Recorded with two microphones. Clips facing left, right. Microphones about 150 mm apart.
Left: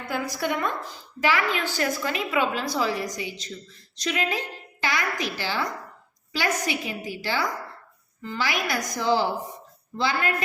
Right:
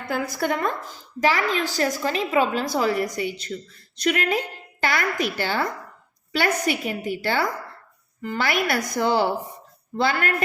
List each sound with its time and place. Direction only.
0.1 s a woman's voice: 50° right (ahead or behind)